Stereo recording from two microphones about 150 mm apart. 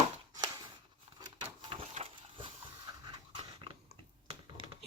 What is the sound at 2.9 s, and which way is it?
Dog, 25° right (ahead or behind).